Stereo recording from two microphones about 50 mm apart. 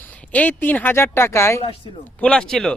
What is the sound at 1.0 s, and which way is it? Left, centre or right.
Speech, left.